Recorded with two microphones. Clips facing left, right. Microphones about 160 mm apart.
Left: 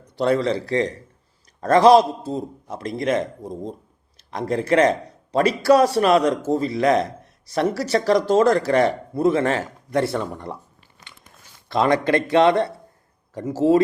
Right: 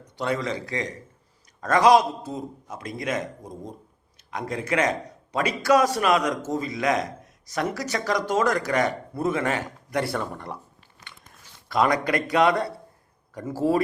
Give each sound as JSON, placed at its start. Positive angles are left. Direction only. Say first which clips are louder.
{"t": 0.2, "sound": "speech", "louder": "left 7 dB", "side_deg": 35}
{"t": 11.7, "sound": "speech", "louder": "left 4 dB", "side_deg": 25}